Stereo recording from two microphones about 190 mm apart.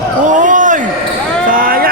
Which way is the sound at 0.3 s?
40° right (ahead or behind).